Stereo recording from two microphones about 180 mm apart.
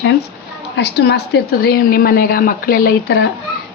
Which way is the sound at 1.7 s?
55° left (ahead or behind).